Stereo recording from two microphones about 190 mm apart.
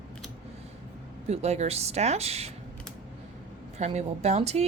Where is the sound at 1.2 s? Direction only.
35° right (ahead or behind).